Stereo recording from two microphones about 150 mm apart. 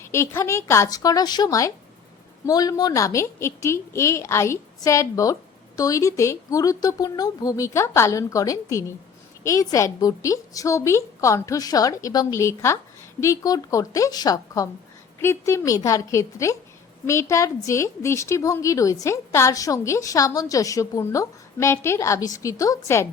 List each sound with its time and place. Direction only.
0.0 s a woman's voice: 20° left (ahead or behind)